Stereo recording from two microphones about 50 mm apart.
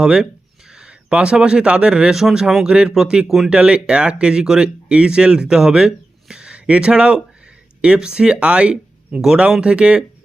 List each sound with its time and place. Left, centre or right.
0.0 s speech: centre
3.2 s speech: centre
3.5 s speech: centre